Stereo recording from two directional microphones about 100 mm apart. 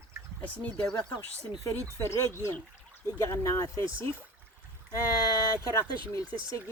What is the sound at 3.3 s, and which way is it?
Speech, 30° left (ahead or behind).